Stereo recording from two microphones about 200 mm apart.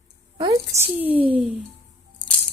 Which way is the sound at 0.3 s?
30° right (ahead or behind).